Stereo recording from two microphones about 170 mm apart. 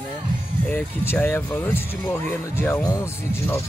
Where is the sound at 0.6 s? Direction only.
10° left (ahead or behind).